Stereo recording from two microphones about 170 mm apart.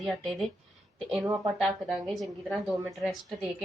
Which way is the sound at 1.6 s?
Centre (ahead or behind).